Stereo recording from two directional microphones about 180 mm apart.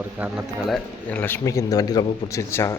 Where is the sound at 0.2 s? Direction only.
Centre (ahead or behind).